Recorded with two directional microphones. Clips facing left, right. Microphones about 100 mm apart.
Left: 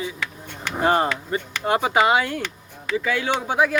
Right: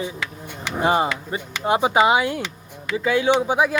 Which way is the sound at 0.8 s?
15° right (ahead or behind).